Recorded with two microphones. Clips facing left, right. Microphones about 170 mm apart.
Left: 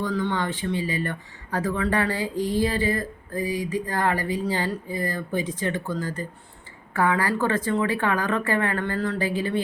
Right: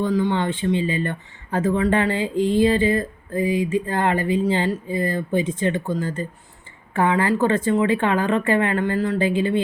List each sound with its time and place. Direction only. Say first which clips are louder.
0.0 s speech: right 5 dB; 20° right (ahead or behind)